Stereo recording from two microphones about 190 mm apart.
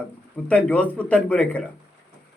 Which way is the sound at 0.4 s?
5° left (ahead or behind).